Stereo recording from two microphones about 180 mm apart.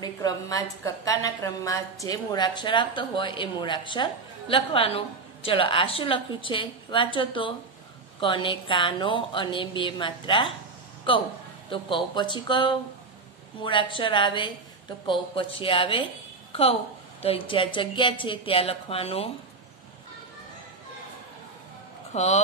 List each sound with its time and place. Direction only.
0.0 s a woman's voice: 20° left (ahead or behind)
17.2 s a woman's voice: 30° left (ahead or behind)
22.1 s speech: 40° left (ahead or behind)